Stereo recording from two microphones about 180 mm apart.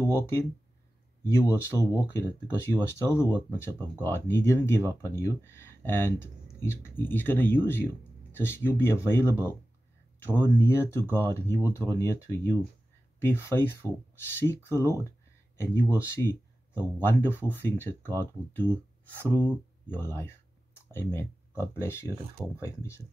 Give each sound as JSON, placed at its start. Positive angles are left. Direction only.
{"t": 0.0, "sound": "speech", "side_deg": 15}
{"t": 15.5, "sound": "a sound", "side_deg": 15}
{"t": 16.0, "sound": "speech", "side_deg": 15}
{"t": 19.9, "sound": "speech", "side_deg": 15}